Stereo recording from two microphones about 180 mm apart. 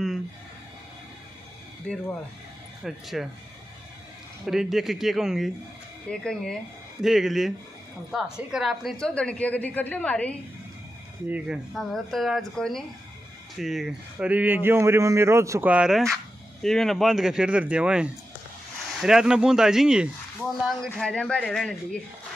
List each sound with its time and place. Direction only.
1.9 s a woman's voice: 5° left (ahead or behind)
4.5 s a woman's voice: centre (ahead or behind)
11.2 s a woman's voice: 5° right (ahead or behind)